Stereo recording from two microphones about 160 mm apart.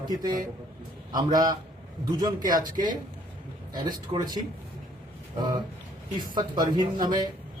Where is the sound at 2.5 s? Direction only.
25° right (ahead or behind).